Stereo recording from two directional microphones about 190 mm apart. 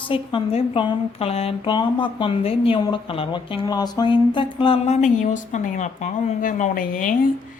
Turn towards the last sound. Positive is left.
turn(degrees=45)  # may be behind; listen again after turning